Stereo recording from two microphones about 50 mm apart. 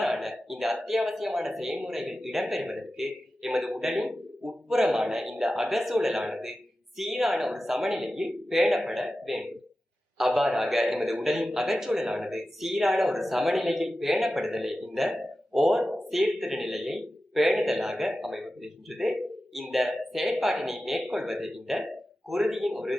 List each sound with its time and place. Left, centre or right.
0.0 s a man's voice: centre